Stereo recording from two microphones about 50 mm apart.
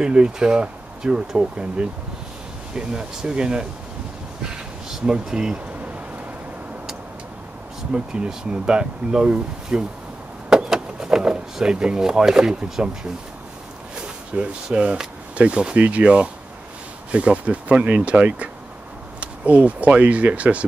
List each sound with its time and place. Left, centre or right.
0.0 s speech: centre
7.9 s speech: centre
10.5 s vehicle: centre
13.9 s speech: centre